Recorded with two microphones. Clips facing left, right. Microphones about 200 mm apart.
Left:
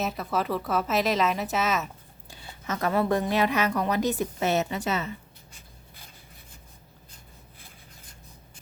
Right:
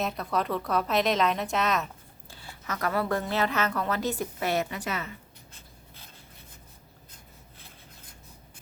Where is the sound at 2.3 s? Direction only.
20° left (ahead or behind).